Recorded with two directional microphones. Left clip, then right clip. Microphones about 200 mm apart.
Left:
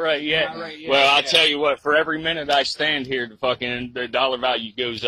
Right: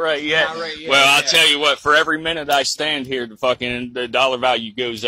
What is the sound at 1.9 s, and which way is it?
Speech, 15° right (ahead or behind).